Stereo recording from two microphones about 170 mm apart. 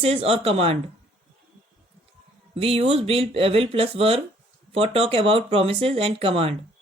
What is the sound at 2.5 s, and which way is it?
Speech, 35° right (ahead or behind).